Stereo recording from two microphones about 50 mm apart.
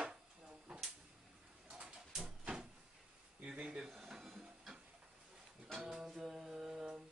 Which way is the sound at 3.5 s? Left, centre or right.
Right.